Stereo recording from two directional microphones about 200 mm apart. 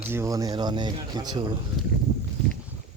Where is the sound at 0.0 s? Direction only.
10° right (ahead or behind).